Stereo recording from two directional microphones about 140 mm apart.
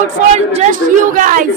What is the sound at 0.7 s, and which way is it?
Speech, 70° right (ahead or behind).